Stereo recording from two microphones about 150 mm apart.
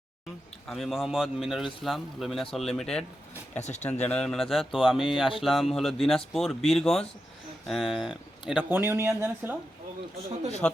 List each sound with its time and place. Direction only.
0.7 s a man's voice: centre (ahead or behind)
3.6 s speech: 50° left (ahead or behind)
4.0 s a man's voice: 5° left (ahead or behind)
8.8 s speech: 15° right (ahead or behind)
10.6 s speech: 5° left (ahead or behind)